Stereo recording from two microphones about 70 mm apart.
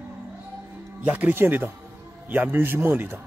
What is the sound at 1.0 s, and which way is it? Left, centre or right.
Speech, right.